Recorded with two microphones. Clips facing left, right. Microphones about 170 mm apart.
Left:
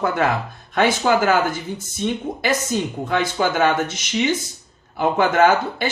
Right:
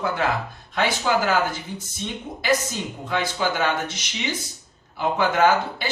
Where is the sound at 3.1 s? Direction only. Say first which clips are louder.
Left 3 dB; 50° left (ahead or behind).